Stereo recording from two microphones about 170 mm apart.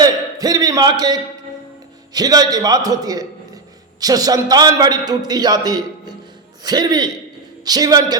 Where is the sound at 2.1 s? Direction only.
25° right (ahead or behind).